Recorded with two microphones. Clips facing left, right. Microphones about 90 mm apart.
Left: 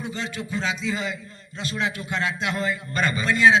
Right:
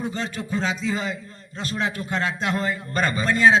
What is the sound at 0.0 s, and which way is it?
A man's voice, 40° right (ahead or behind).